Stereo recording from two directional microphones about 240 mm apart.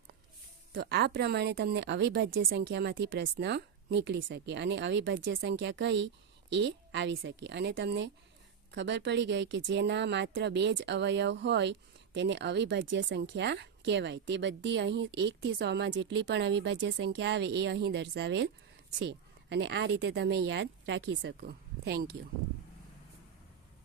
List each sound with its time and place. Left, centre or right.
0.7 s speech: right